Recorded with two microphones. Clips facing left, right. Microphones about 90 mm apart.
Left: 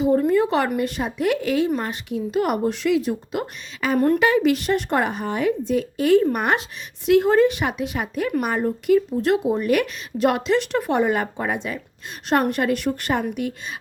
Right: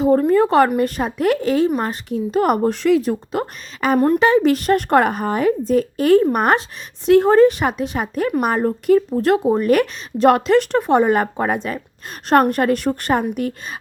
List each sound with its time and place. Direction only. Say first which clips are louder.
0.0 s a sound: right 4 dB; 40° right (ahead or behind)
0.8 s speech: right 4 dB; 40° right (ahead or behind)
4.0 s speech: right 3 dB; 30° right (ahead or behind)